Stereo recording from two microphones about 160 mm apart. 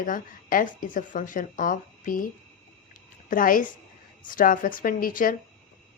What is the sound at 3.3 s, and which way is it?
A woman's voice, 60° left (ahead or behind).